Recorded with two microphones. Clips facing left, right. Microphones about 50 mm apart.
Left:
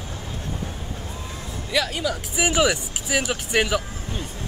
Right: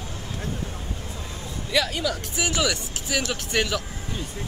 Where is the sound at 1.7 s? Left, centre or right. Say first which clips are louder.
Even; centre.